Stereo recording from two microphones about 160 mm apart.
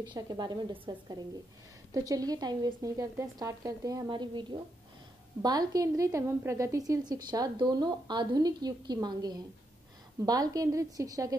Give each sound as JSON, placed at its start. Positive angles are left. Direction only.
{"t": 0.0, "sound": "a woman's voice", "side_deg": -25}